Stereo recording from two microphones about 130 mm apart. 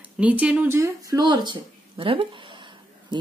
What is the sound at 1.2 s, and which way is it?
Speech, 35° right (ahead or behind).